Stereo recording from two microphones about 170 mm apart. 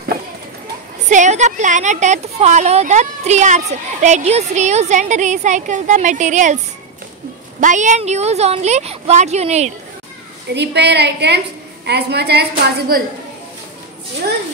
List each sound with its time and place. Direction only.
1.0 s a woman's voice: 45° right (ahead or behind)
7.6 s a woman's voice: 45° right (ahead or behind)
10.5 s a woman's voice: 80° right